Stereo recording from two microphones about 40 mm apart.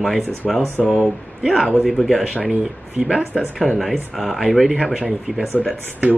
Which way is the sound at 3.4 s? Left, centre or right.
Centre.